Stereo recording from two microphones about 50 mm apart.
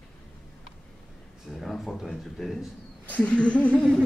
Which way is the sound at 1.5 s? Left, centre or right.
Centre.